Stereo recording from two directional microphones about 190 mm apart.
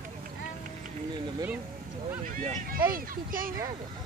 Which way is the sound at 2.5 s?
50° right (ahead or behind).